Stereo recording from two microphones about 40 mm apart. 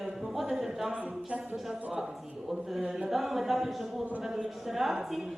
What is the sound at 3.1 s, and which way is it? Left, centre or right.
A woman's voice, centre.